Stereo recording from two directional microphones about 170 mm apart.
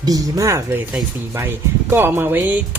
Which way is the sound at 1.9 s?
15° right (ahead or behind).